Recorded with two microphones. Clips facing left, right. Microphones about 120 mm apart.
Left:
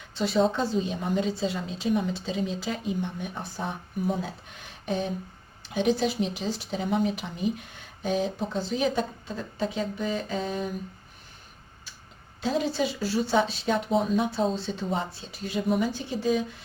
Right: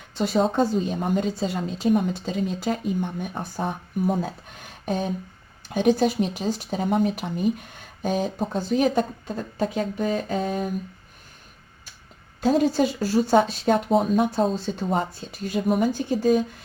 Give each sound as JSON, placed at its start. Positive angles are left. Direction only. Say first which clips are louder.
{"t": 0.1, "sound": "speech", "louder": "right 2 dB", "side_deg": -45}
{"t": 12.4, "sound": "speech", "louder": "right 7 dB", "side_deg": -45}